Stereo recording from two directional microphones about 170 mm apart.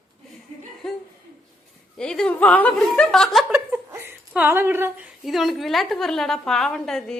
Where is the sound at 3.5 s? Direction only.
15° right (ahead or behind).